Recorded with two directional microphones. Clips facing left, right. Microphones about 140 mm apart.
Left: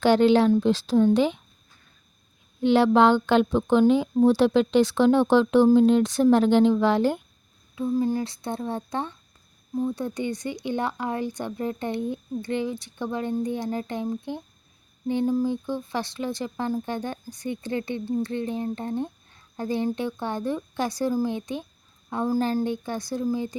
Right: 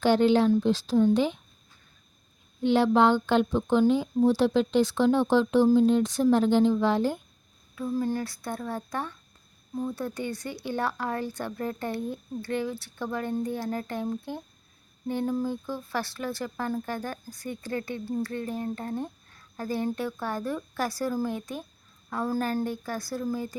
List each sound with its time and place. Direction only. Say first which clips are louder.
0.0 s speech: left 3 dB; 85° left
2.6 s speech: left 3 dB; 80° left
7.8 s speech: left 4 dB; 15° left (ahead or behind)